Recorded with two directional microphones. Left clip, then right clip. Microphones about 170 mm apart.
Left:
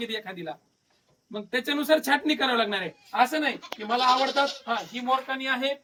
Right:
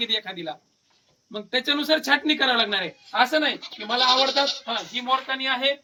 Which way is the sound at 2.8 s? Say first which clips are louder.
Right 2 dB; centre (ahead or behind).